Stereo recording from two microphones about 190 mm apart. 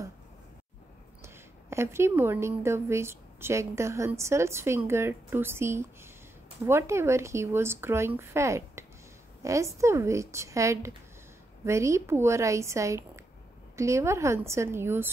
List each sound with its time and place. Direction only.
1.2 s a woman's voice: 15° right (ahead or behind)